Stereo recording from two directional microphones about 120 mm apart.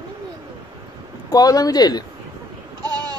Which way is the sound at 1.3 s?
30° left (ahead or behind).